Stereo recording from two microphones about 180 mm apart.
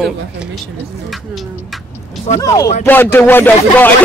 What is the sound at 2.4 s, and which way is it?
Speech, 20° left (ahead or behind).